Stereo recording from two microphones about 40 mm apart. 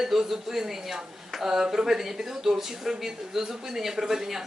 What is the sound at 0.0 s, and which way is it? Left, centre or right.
Speech, centre.